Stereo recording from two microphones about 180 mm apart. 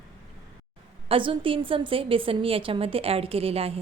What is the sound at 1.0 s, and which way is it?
A woman's voice, 30° right (ahead or behind).